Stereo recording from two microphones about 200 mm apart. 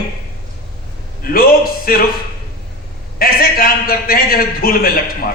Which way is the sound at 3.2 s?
50° left (ahead or behind).